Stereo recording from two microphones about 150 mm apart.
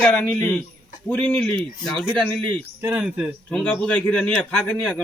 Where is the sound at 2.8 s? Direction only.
10° right (ahead or behind).